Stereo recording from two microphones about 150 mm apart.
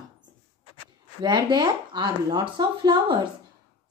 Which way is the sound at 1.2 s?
30° right (ahead or behind).